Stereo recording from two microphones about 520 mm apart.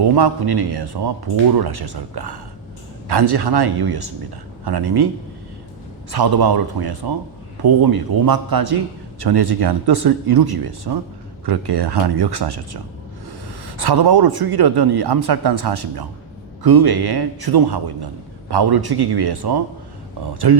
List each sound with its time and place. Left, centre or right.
0.0 s a man's voice: right
6.1 s a man's voice: right